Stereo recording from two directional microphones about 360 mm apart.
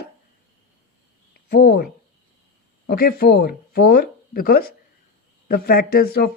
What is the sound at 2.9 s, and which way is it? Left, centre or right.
Speech, left.